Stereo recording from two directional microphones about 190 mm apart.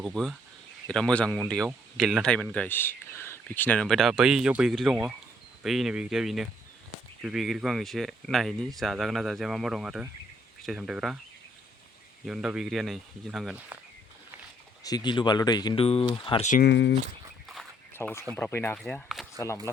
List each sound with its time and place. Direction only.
0.0 s speech: centre (ahead or behind)
12.2 s speech: 5° right (ahead or behind)
14.8 s speech: 20° left (ahead or behind)
16.5 s speech: 55° left (ahead or behind)
17.9 s speech: 10° left (ahead or behind)
19.7 s speech: 15° left (ahead or behind)